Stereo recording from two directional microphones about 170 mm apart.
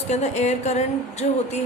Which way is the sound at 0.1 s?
40° left (ahead or behind).